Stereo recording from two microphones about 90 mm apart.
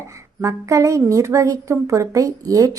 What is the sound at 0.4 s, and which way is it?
A woman's voice, 35° right (ahead or behind).